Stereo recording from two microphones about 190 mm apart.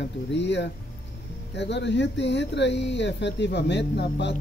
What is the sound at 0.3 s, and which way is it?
Speech, 70° left (ahead or behind).